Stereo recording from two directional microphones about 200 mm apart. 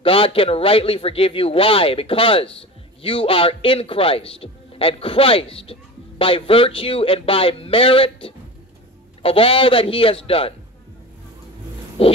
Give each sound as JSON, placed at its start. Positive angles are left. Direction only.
{"t": 0.0, "sound": "a man's voice", "side_deg": 25}
{"t": 12.0, "sound": "a man's voice", "side_deg": 30}